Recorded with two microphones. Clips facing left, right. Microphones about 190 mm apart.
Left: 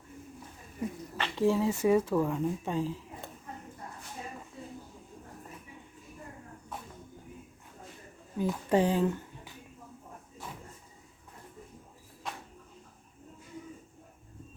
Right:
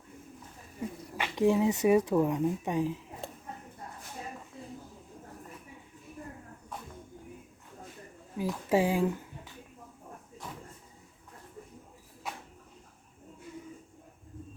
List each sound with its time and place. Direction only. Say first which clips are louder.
1.1 s speech: right 2 dB; 15° right (ahead or behind)
8.4 s speech: left 1 dB; 5° right (ahead or behind)